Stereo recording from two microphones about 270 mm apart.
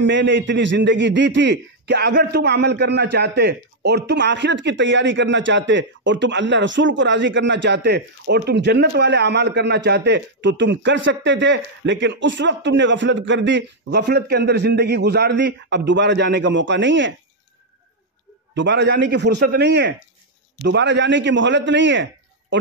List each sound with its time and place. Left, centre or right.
0.0 s a man's voice: right
18.5 s a man's voice: right